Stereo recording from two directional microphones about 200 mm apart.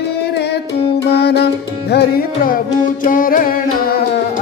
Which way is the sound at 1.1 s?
55° left (ahead or behind).